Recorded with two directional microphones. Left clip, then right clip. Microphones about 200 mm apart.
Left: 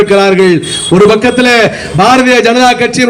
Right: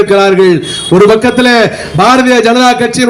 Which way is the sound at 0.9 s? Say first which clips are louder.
Right 1 dB; 40° right (ahead or behind).